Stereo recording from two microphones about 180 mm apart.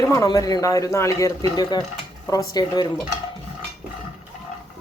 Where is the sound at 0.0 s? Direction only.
20° left (ahead or behind).